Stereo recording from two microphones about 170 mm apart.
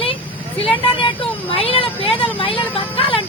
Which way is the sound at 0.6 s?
30° left (ahead or behind).